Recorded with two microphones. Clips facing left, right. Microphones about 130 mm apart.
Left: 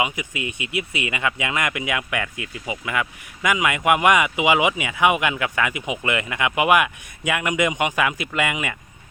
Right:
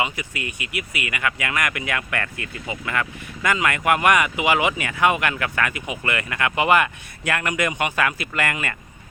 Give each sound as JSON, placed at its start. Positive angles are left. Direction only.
{"t": 0.0, "sound": "speech", "side_deg": 20}